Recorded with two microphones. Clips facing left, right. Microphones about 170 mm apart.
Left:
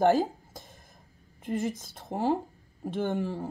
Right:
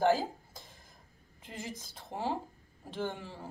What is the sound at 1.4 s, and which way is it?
Speech, 50° left (ahead or behind).